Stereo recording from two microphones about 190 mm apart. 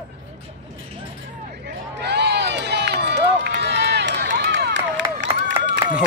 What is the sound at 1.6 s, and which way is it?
Run, 65° right (ahead or behind).